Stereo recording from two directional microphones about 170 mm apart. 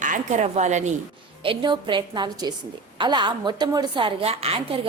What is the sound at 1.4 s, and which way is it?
A woman's voice, 25° right (ahead or behind).